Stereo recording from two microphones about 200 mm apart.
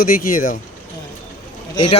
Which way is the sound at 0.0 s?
45° left (ahead or behind).